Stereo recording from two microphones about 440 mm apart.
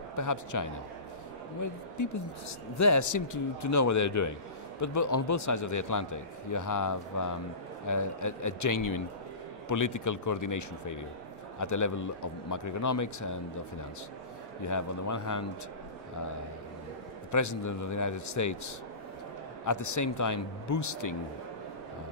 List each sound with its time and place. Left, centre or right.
0.1 s speech: left
2.8 s a man's voice: left
14.6 s a man's voice: left
17.3 s a man's voice: left
19.6 s a man's voice: left